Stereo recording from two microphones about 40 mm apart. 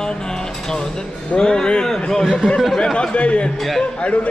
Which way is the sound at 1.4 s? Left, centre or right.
Left.